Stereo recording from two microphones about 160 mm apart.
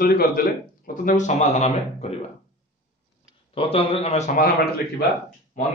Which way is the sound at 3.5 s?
35° left (ahead or behind).